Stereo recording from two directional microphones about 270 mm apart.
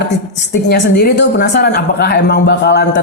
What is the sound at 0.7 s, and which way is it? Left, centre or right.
Speech, left.